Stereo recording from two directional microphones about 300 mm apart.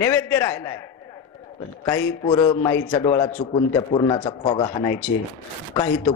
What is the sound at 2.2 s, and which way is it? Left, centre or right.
A man's voice, centre.